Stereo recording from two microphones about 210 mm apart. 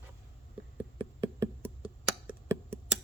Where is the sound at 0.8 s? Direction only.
10° right (ahead or behind).